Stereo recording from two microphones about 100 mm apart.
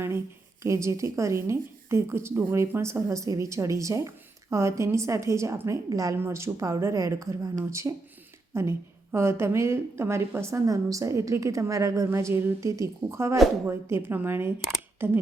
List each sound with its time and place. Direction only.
0.6 s a woman's voice: 30° right (ahead or behind)